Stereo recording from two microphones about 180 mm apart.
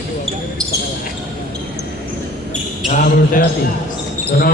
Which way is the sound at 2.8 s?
50° left (ahead or behind).